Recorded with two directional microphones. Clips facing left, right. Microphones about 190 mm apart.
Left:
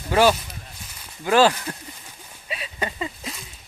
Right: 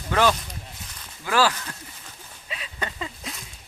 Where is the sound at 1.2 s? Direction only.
25° left (ahead or behind).